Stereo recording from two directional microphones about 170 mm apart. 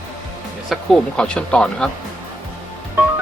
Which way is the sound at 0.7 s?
5° left (ahead or behind).